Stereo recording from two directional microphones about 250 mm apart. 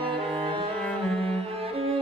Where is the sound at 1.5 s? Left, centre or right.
Right.